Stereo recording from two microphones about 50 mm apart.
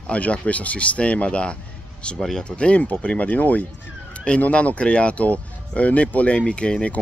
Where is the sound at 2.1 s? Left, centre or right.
Centre.